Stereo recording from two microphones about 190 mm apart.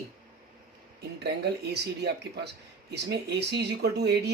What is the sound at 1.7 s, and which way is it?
Speech, 60° right (ahead or behind).